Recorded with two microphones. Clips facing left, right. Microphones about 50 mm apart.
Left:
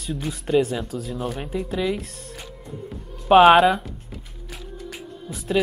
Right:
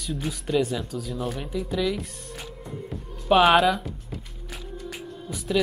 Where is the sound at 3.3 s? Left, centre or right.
Left.